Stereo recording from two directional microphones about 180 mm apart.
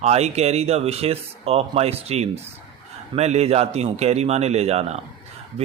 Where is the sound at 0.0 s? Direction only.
35° right (ahead or behind).